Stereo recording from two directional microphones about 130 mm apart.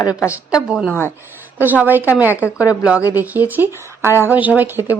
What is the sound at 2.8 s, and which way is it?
Speech, 10° right (ahead or behind).